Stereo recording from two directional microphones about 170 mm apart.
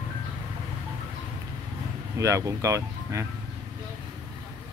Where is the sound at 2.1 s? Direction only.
20° right (ahead or behind).